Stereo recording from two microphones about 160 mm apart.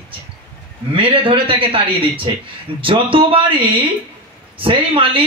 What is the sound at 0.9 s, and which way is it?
A man's voice, 35° right (ahead or behind).